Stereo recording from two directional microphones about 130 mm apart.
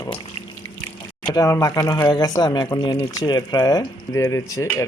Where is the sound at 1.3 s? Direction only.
25° left (ahead or behind).